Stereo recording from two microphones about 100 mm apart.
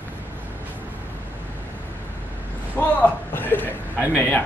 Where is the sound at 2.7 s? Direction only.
20° left (ahead or behind).